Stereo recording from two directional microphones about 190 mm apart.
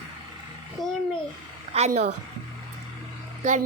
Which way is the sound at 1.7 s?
35° right (ahead or behind).